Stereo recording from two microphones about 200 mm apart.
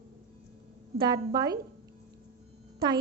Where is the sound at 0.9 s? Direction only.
20° right (ahead or behind).